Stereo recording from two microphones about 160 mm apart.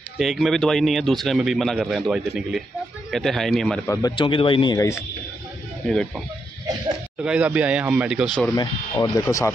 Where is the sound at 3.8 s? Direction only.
20° left (ahead or behind).